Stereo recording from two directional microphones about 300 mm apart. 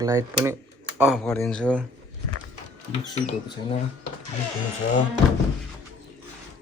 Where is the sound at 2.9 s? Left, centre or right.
Centre.